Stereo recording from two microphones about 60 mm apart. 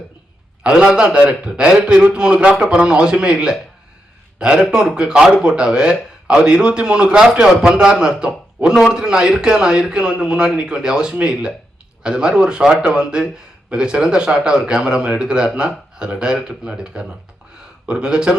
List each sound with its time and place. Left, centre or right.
0.6 s a man's voice: centre